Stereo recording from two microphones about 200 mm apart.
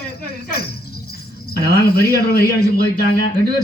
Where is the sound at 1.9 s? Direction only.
50° left (ahead or behind).